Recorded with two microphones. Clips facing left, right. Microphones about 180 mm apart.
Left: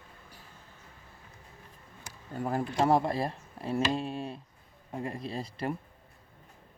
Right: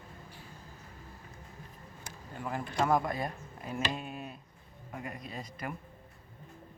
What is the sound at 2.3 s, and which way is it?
Speech, 35° left (ahead or behind).